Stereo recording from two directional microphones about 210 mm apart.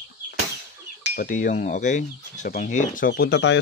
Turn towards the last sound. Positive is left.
turn(degrees=55)  # may be behind; listen again after turning